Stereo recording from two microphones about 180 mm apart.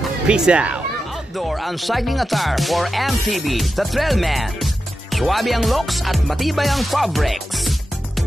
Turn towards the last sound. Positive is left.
turn(degrees=0)  # may be behind; listen again after turning